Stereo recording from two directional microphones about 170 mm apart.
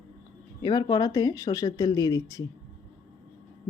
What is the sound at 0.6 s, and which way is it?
A woman's voice, 25° left (ahead or behind).